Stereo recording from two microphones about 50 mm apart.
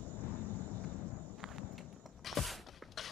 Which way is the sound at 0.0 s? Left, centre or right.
Left.